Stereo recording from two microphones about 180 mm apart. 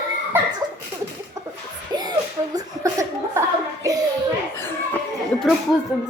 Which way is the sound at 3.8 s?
20° right (ahead or behind).